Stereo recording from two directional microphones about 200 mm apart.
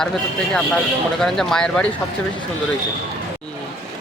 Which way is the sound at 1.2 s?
Centre (ahead or behind).